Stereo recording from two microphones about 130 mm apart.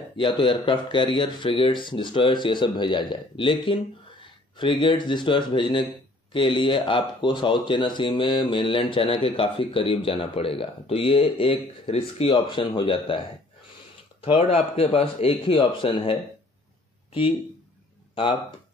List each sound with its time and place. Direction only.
0.2 s speech: 40° left (ahead or behind)
14.2 s speech: 45° left (ahead or behind)
18.2 s speech: 40° left (ahead or behind)